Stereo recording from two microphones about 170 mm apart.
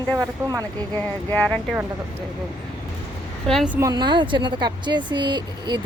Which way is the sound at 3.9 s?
25° right (ahead or behind).